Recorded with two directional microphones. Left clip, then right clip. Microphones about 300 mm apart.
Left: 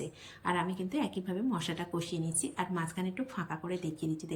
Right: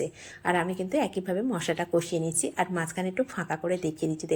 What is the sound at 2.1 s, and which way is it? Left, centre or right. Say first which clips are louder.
Speech: right 8 dB; centre.